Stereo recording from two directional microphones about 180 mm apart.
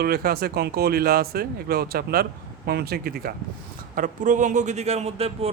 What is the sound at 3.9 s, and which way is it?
A man's voice, 45° right (ahead or behind).